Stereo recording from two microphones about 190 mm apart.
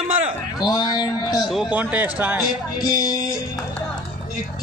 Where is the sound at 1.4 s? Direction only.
5° right (ahead or behind).